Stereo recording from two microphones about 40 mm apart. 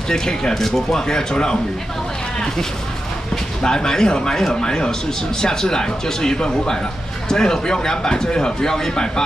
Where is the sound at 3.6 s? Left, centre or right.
Centre.